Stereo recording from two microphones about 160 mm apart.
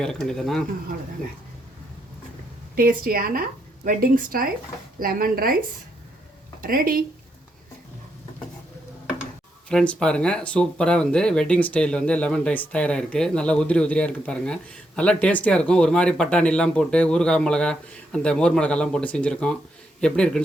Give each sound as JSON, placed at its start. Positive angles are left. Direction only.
{"t": 0.0, "sound": "speech", "side_deg": 5}
{"t": 2.7, "sound": "a woman's voice", "side_deg": -65}
{"t": 6.6, "sound": "a woman's voice", "side_deg": -65}
{"t": 9.6, "sound": "speech", "side_deg": 5}